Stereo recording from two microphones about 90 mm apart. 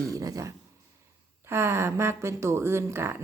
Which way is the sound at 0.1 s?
40° right (ahead or behind).